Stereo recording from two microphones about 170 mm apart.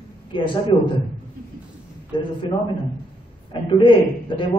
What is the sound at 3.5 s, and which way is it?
Speech, 30° left (ahead or behind).